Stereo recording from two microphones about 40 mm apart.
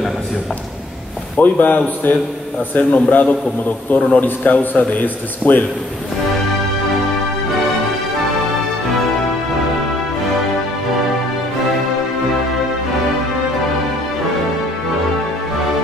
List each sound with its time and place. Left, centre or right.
1.4 s speech: left